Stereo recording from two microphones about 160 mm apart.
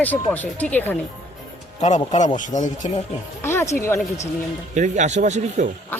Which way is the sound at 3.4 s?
15° left (ahead or behind).